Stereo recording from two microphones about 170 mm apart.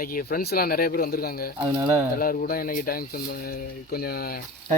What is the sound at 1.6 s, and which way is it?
Speech, 30° right (ahead or behind).